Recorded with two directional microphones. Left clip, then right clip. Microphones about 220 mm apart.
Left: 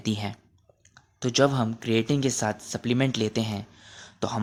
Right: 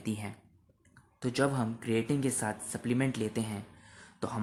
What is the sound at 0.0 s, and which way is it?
Speech, 40° left (ahead or behind).